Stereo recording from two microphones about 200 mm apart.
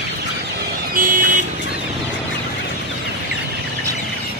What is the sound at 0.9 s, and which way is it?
Vehicle, 45° right (ahead or behind).